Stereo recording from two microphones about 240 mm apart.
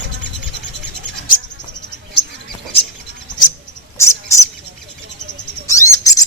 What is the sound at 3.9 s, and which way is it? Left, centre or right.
Bird, centre.